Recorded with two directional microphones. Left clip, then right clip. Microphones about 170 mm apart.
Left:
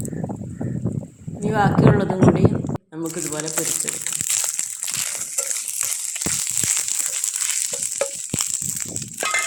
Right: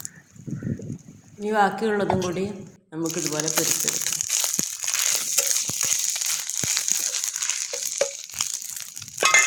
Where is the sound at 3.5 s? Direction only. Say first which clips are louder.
Right 2 dB; 15° right (ahead or behind).